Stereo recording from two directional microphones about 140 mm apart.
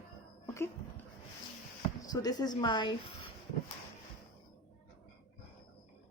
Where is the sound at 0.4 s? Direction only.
20° left (ahead or behind).